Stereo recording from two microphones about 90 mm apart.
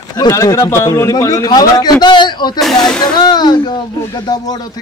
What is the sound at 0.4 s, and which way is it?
A man's voice, 30° left (ahead or behind).